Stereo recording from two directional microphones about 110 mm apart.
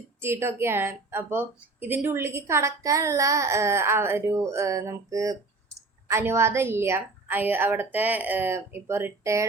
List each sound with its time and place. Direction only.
0.2 s a woman's voice: 25° right (ahead or behind)